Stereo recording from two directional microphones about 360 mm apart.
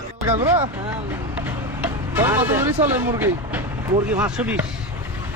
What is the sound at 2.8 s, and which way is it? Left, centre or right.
Speech, centre.